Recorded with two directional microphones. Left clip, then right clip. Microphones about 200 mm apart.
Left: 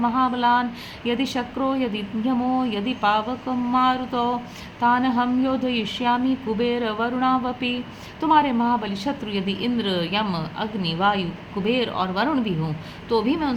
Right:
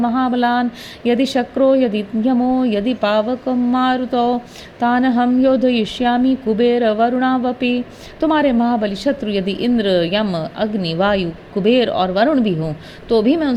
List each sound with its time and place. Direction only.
0.0 s a woman's voice: 30° right (ahead or behind)